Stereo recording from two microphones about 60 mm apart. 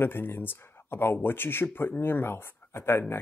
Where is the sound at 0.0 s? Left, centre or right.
Left.